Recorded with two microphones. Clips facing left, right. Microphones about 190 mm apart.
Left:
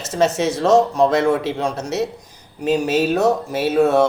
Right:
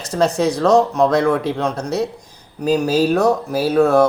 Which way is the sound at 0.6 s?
25° left (ahead or behind).